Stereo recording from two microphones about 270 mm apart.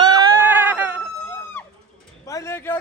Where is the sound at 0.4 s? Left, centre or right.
Centre.